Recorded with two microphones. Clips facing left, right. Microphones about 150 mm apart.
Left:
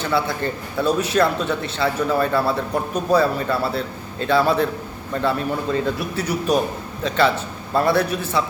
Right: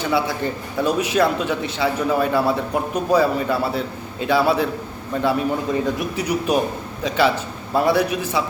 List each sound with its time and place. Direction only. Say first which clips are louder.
0.0 s a man's voice: right 1 dB; 10° right (ahead or behind)